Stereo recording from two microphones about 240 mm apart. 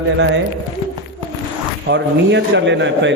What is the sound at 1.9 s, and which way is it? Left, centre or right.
A man's voice, right.